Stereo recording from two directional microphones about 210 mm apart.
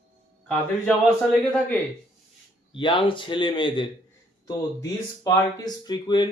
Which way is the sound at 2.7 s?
25° left (ahead or behind).